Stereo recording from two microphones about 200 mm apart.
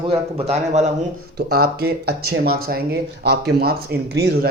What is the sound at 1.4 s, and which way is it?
Speech, 50° right (ahead or behind).